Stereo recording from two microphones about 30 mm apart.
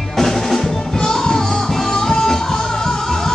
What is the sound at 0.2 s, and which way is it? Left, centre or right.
Music, centre.